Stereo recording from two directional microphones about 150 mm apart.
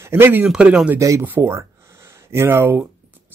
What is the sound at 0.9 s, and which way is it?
Speech, 20° right (ahead or behind).